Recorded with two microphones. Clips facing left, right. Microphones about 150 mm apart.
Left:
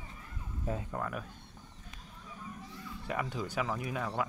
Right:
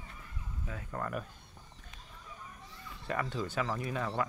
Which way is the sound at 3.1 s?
10° left (ahead or behind).